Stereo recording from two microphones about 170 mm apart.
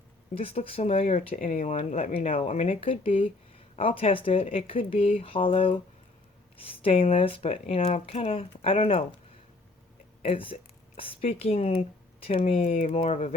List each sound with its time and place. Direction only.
0.3 s speech: 35° left (ahead or behind)
10.2 s speech: 30° left (ahead or behind)